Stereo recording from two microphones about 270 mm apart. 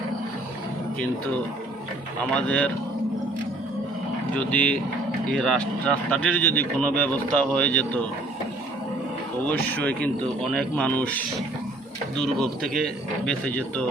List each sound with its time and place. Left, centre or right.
2.3 s speech: centre
4.4 s speech: centre
9.5 s speech: centre